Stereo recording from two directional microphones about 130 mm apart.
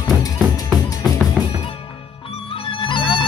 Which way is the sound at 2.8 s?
40° left (ahead or behind).